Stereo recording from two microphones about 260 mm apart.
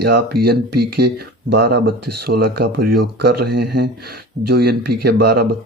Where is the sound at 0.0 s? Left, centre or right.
Right.